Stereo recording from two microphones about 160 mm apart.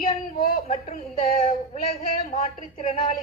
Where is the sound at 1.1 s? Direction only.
45° left (ahead or behind).